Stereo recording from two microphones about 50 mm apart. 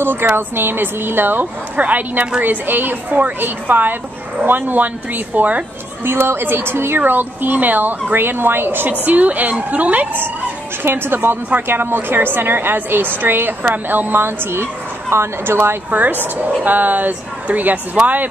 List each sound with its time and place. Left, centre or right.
0.0 s a sound: right
0.3 s a woman's voice: right
6.0 s a woman's voice: right
9.0 s a woman's voice: right
15.9 s a woman's voice: right